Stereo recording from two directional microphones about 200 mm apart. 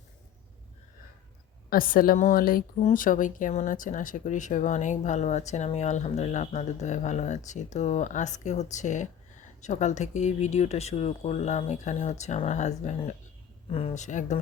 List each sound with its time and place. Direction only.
1.7 s a woman's voice: 45° left (ahead or behind)